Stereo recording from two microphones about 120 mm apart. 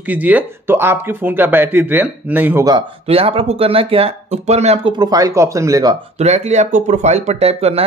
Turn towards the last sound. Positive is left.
turn(degrees=-60)  # may be behind; listen again after turning